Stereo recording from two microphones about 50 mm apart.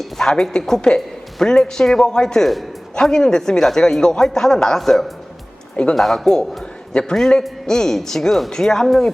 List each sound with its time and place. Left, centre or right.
0.0 s a woman's voice: centre
5.7 s speech: centre
6.0 s a man's voice: centre